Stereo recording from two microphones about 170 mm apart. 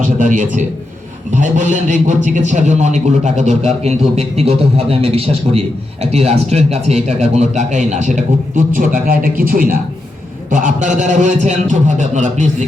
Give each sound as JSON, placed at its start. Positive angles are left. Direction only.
{"t": 0.0, "sound": "a man's voice", "side_deg": -50}